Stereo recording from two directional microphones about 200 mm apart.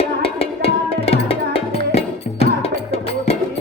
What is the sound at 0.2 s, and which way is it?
Music, 30° left (ahead or behind).